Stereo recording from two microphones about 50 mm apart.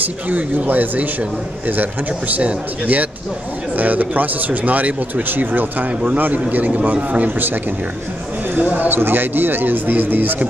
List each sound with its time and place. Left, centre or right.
0.0 s speech: right
8.5 s speech: right